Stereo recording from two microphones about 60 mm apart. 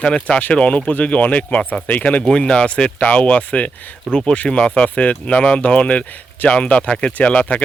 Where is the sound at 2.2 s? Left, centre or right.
Centre.